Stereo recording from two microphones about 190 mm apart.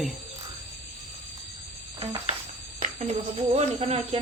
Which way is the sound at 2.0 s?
30° right (ahead or behind).